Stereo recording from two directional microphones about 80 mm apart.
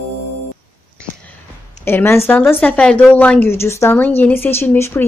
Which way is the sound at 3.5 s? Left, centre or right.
Left.